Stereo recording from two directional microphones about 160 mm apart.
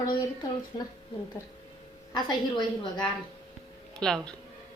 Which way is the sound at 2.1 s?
30° left (ahead or behind).